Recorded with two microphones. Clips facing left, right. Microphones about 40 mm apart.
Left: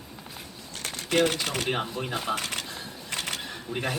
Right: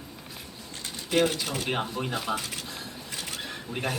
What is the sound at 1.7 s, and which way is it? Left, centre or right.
Speech, centre.